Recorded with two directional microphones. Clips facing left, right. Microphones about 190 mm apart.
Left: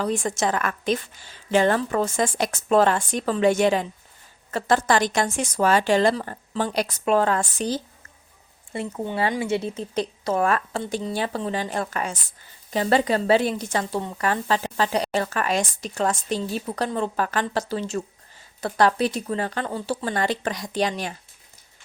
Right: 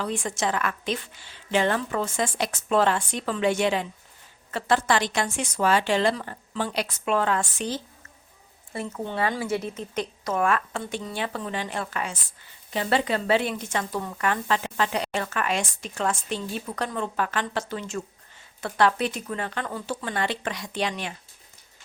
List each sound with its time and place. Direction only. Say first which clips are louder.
0.0 s a woman's voice: left 4 dB; 45° left (ahead or behind)
9.1 s speech: left 3 dB; 25° left (ahead or behind)